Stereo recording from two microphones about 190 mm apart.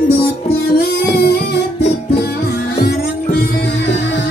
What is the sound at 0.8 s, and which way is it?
Music, 55° left (ahead or behind).